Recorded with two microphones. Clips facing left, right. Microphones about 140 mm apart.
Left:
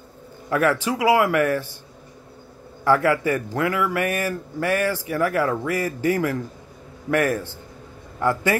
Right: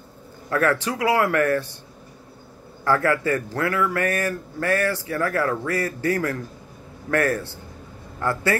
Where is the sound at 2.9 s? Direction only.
15° left (ahead or behind).